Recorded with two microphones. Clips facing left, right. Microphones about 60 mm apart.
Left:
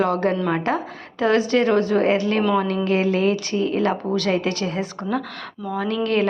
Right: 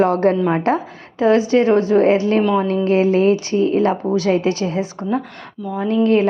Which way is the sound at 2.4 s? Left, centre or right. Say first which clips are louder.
Right 3 dB; centre.